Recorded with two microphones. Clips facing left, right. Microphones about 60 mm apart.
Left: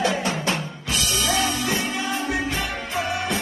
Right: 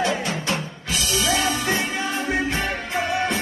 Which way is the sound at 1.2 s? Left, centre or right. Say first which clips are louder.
Right 1 dB; right.